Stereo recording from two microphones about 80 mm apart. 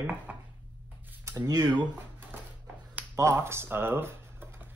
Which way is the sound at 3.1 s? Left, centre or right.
Right.